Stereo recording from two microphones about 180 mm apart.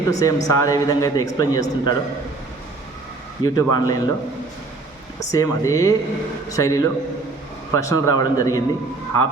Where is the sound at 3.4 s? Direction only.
20° left (ahead or behind).